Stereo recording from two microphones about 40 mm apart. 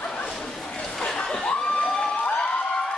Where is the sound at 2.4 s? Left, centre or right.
Left.